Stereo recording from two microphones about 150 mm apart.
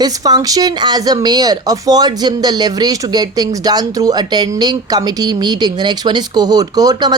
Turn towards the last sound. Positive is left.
turn(degrees=-25)  # may be behind; listen again after turning